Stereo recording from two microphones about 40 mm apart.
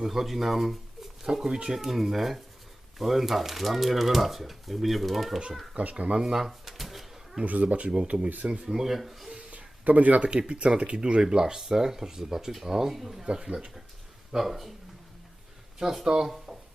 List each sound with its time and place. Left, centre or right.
0.0 s speech: centre
1.5 s speech: right
1.7 s speech: centre
5.7 s speech: right
6.3 s drawer open or close: centre
7.4 s speech: right
8.6 s speech: centre
9.5 s a sound: right
10.5 s speech: right; by 13.2 s centre
13.2 s speech: centre
14.3 s speech: centre
15.8 s speech: centre
16.2 s a sound: centre